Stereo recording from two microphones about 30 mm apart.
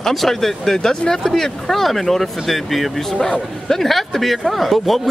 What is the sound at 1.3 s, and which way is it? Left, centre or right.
A man's voice, centre.